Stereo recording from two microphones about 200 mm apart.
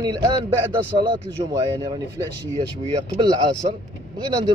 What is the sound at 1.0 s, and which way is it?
Speech, 20° right (ahead or behind).